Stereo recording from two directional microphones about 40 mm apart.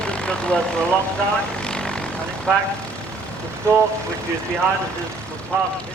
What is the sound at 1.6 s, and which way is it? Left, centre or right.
Vehicle, left.